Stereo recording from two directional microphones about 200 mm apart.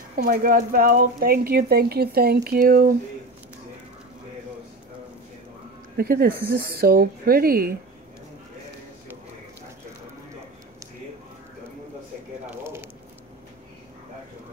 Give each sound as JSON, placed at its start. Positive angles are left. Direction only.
{"t": 0.2, "sound": "speech", "side_deg": -45}
{"t": 5.9, "sound": "speech", "side_deg": -50}
{"t": 12.4, "sound": "squish", "side_deg": -10}